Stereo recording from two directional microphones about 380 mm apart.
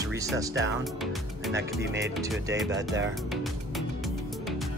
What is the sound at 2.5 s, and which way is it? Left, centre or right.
Speech, right.